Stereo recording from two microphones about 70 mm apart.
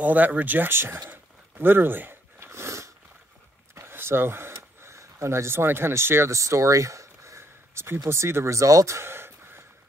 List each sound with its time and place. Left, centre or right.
0.0 s speech: right
1.1 s a sound: right
8.0 s speech: right